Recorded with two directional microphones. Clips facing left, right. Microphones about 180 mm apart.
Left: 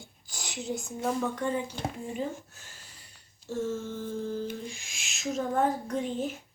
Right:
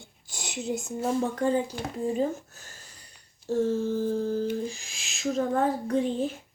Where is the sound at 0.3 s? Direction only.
20° right (ahead or behind).